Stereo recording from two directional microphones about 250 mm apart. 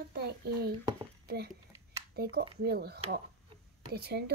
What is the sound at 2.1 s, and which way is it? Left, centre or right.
A child's voice, right.